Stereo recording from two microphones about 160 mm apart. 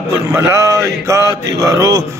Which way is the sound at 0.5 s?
20° right (ahead or behind).